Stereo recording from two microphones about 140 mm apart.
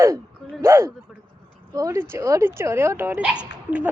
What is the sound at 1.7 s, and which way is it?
Speech, 25° right (ahead or behind).